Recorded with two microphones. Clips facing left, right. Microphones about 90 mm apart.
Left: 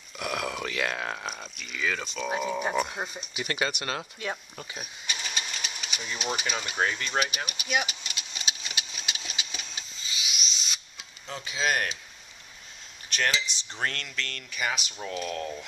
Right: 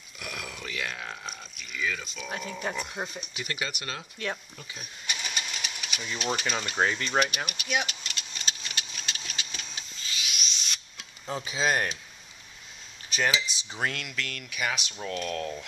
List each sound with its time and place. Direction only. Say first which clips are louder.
0.2 s burping: left 8 dB; 65° left (ahead or behind)
1.8 s speech: left 2 dB; 65° left (ahead or behind)
2.2 s speech: left 5 dB; 20° left (ahead or behind)
3.4 s speech: left 5 dB; 60° left (ahead or behind)
4.2 s speech: right 2 dB; 15° left (ahead or behind)
4.6 s speech: left 4 dB; 50° left (ahead or behind)
5.0 s a sound: right 1 dB; 5° right (ahead or behind)
5.5 s engine: even; 5° right (ahead or behind)
5.9 s speech: right 1 dB; 10° left (ahead or behind)
7.2 s engine: right 4 dB; 5° left (ahead or behind)
11.5 s speech: right 1 dB; centre (ahead or behind)
13.1 s speech: right 1 dB; 5° right (ahead or behind)